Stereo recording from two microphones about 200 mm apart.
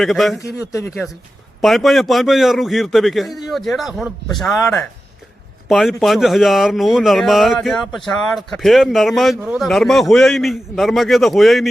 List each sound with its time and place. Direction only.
0.0 s speech: centre (ahead or behind)
0.3 s speech: 15° left (ahead or behind)
1.0 s speech: centre (ahead or behind)